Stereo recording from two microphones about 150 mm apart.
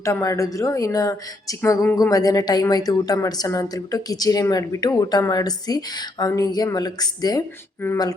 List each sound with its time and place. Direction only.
0.0 s a woman's voice: 20° left (ahead or behind)